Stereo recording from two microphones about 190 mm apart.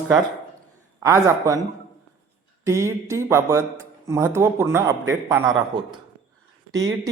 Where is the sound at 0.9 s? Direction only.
15° right (ahead or behind).